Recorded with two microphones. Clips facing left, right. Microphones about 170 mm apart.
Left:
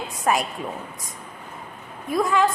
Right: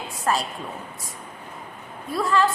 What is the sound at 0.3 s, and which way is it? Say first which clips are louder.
Speech: left 2 dB; 15° left (ahead or behind).